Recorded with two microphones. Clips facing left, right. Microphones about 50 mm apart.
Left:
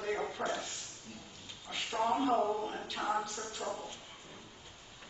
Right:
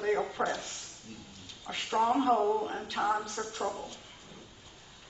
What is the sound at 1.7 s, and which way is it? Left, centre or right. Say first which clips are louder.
Speech: right 3 dB; right.